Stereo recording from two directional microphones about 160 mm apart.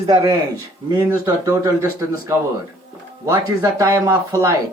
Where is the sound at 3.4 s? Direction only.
20° right (ahead or behind).